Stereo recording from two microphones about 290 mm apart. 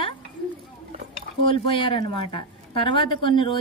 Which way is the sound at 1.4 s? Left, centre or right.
Centre.